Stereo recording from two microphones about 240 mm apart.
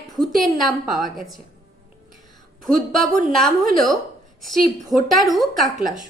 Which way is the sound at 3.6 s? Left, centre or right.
Right.